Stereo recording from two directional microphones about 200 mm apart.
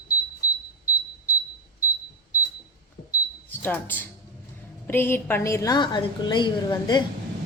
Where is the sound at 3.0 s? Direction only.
45° left (ahead or behind).